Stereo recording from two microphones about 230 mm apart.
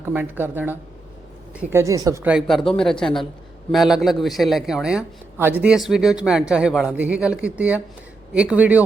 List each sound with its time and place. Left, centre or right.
0.0 s speech: centre